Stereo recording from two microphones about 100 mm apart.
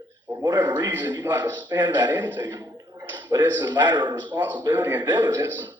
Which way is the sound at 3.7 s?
20° right (ahead or behind).